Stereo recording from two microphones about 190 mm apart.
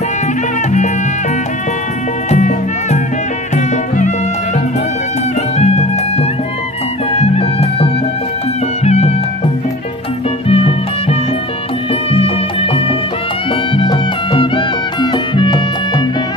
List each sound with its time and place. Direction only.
2.3 s music: 40° left (ahead or behind)
5.6 s music: 35° left (ahead or behind)
10.5 s music: 30° left (ahead or behind)
13.7 s music: 25° left (ahead or behind)